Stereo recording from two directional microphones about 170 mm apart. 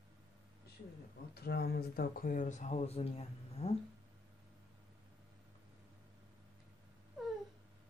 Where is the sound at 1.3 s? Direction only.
70° left (ahead or behind); by 3.7 s 35° left (ahead or behind).